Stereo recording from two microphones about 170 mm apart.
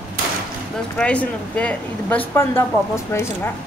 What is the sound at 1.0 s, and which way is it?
Speech, 5° left (ahead or behind).